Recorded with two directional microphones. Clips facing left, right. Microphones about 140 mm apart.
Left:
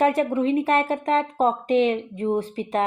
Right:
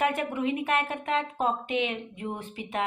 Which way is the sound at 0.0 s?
35° left (ahead or behind).